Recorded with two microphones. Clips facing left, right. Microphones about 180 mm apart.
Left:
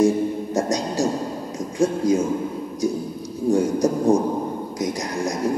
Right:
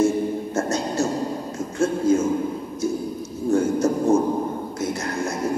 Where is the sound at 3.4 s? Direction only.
15° left (ahead or behind).